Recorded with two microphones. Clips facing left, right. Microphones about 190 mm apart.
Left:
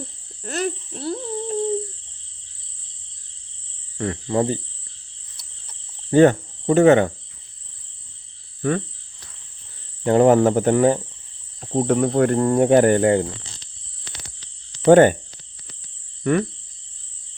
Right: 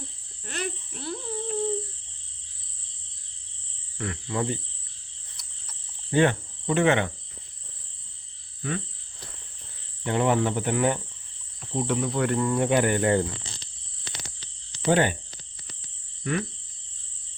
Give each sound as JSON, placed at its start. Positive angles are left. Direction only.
{"t": 0.4, "sound": "a sound", "side_deg": 40}
{"t": 3.9, "sound": "speech", "side_deg": 35}
{"t": 6.1, "sound": "cricket", "side_deg": 40}
{"t": 8.6, "sound": "cricket", "side_deg": 50}
{"t": 10.0, "sound": "cricket", "side_deg": 40}
{"t": 14.8, "sound": "cricket", "side_deg": 50}
{"t": 16.2, "sound": "a sound", "side_deg": 50}